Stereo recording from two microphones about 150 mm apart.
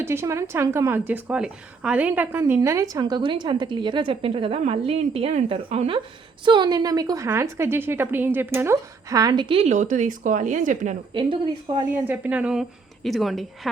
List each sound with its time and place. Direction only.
0.0 s a woman's voice: 15° right (ahead or behind)
2.4 s a woman's voice: 20° right (ahead or behind); by 10.9 s 55° right (ahead or behind)
11.1 s a woman's voice: 35° right (ahead or behind)
12.0 s a woman's voice: 10° right (ahead or behind)